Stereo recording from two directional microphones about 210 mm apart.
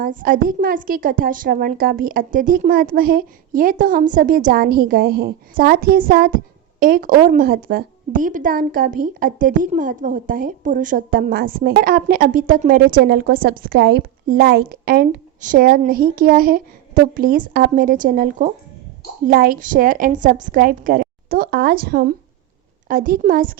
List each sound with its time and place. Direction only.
0.0 s a woman's voice: 40° right (ahead or behind)